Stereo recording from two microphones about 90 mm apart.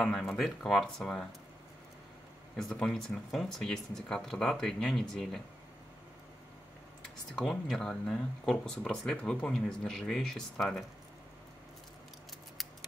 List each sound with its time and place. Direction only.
0.0 s speech: 10° left (ahead or behind)
2.5 s speech: 10° left (ahead or behind)
7.3 s speech: 5° left (ahead or behind)